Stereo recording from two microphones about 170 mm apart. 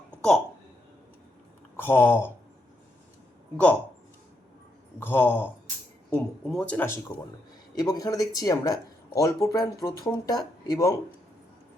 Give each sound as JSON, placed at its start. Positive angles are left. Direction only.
{"t": 0.2, "sound": "speech", "side_deg": 5}
{"t": 1.7, "sound": "speech", "side_deg": 15}
{"t": 4.9, "sound": "speech", "side_deg": 10}